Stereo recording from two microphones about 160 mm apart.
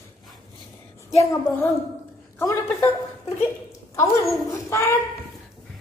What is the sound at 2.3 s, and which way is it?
Speech, 15° left (ahead or behind).